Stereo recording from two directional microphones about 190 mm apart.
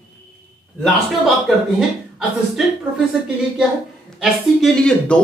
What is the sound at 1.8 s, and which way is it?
Speech, 5° right (ahead or behind).